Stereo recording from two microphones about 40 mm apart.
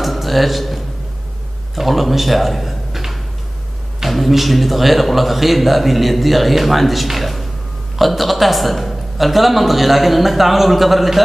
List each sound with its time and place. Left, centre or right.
0.0 s music: centre
1.8 s a man's voice: centre